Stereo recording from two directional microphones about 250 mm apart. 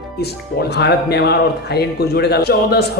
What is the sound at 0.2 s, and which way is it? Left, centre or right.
Speech, left.